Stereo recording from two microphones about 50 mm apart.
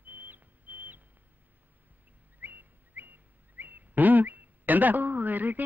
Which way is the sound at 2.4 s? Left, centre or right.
Right.